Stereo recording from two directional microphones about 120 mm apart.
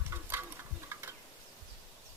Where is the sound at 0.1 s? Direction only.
20° right (ahead or behind).